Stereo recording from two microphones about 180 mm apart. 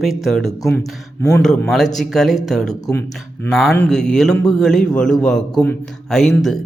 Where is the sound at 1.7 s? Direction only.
Centre (ahead or behind).